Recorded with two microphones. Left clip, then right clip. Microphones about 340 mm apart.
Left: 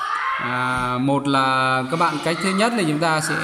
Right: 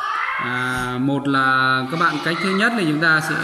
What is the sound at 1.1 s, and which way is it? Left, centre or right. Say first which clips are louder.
Speech: right 3 dB; centre.